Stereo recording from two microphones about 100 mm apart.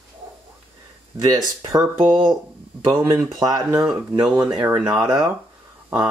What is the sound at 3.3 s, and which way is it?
Speech, 40° right (ahead or behind).